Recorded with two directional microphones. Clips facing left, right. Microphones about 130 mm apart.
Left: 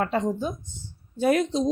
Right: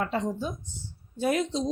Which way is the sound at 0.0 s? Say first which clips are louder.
Left 4 dB; 55° left (ahead or behind).